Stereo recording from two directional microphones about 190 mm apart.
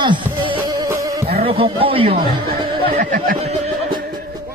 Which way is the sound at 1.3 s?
30° right (ahead or behind).